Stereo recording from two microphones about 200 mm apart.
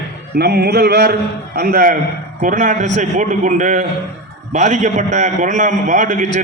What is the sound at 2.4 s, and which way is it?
A man's voice, 40° right (ahead or behind).